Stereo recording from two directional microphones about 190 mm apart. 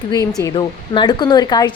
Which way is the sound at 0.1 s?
20° left (ahead or behind).